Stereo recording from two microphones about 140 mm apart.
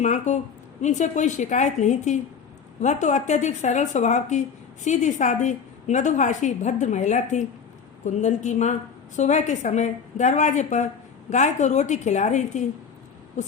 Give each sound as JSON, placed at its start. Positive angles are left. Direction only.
{"t": 0.0, "sound": "a woman's voice", "side_deg": 60}